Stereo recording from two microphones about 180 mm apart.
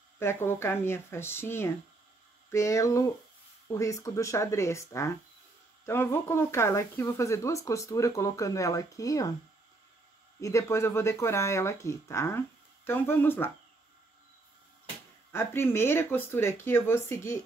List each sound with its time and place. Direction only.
0.2 s speech: 15° left (ahead or behind)
10.4 s speech: 15° left (ahead or behind)
15.3 s speech: 15° left (ahead or behind)